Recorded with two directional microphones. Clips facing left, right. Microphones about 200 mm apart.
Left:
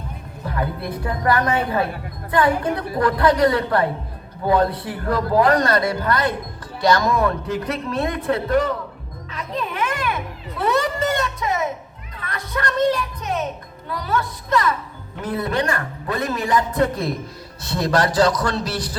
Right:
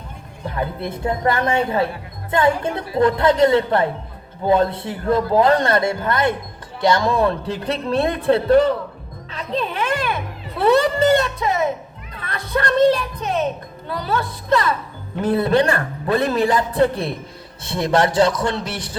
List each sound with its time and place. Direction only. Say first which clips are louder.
0.4 s a man's voice: right 1 dB; 25° right (ahead or behind)
9.3 s music: right 3 dB; 30° right (ahead or behind)
15.2 s a man's voice: right 6 dB; 30° right (ahead or behind)